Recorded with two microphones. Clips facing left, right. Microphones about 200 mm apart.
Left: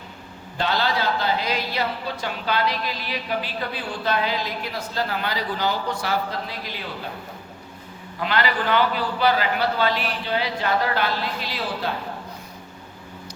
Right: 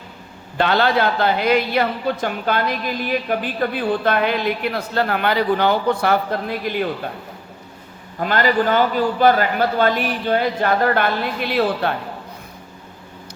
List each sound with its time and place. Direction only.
0.5 s a woman's voice: 60° right (ahead or behind)
8.2 s a man's voice: 45° right (ahead or behind)